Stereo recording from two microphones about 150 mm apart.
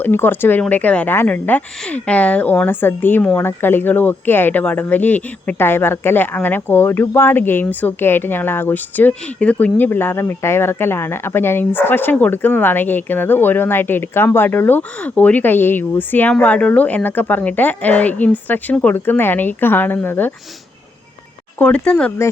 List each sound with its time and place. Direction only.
0.0 s speech: 15° left (ahead or behind)
21.6 s speech: 10° left (ahead or behind)